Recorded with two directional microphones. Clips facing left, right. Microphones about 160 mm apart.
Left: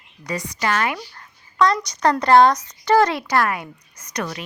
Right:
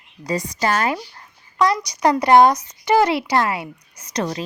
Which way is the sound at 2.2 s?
15° right (ahead or behind).